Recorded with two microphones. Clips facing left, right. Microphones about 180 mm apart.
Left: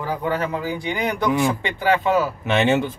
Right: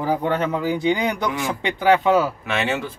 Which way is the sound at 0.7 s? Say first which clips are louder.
Right 4 dB; 20° right (ahead or behind).